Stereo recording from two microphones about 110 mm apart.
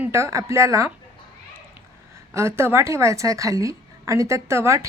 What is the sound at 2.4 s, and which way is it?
Speech, 25° right (ahead or behind).